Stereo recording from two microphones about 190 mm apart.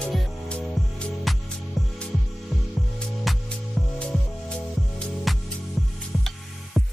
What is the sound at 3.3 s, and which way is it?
Music, centre (ahead or behind).